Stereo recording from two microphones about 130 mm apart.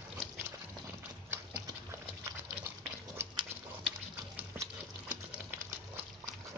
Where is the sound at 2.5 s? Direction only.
25° right (ahead or behind).